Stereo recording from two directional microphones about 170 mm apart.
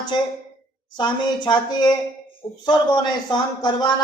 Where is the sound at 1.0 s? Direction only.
25° left (ahead or behind).